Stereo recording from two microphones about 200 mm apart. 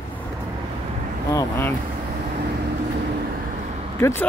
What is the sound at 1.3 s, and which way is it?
Speech, 15° left (ahead or behind).